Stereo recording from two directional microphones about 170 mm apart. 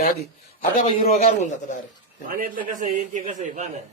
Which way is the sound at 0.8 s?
35° left (ahead or behind).